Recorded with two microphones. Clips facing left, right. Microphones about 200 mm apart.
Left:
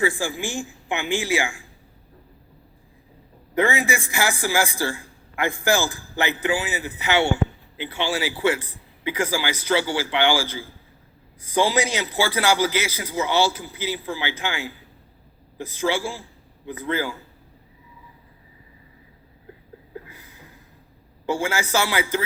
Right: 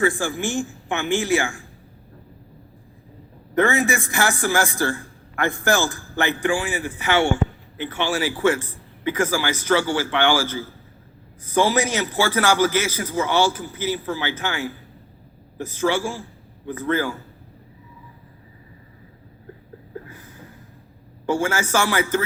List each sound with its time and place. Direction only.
0.2 s a man's voice: 15° left (ahead or behind)
3.5 s a man's voice: 15° left (ahead or behind)
6.7 s a man's voice: 10° left (ahead or behind)
21.2 s a man's voice: 10° left (ahead or behind)